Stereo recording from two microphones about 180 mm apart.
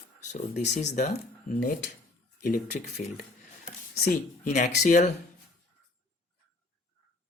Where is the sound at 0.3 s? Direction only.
40° left (ahead or behind).